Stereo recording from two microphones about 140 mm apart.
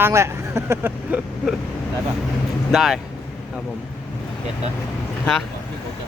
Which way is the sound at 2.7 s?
Centre (ahead or behind).